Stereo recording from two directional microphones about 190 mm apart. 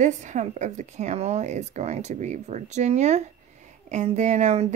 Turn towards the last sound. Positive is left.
turn(degrees=-35)  # may be behind; listen again after turning